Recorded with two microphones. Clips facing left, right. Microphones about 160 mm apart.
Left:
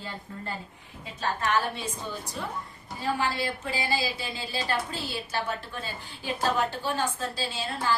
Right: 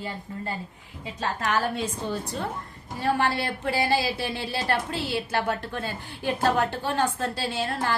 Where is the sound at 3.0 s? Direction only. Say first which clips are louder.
Right 4 dB; 60° right (ahead or behind).